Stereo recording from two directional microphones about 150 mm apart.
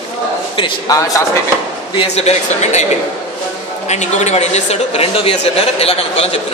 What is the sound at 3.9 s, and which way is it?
A man's voice, 50° left (ahead or behind).